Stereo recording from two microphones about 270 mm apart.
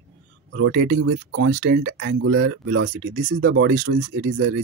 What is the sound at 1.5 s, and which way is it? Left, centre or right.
Speech, right.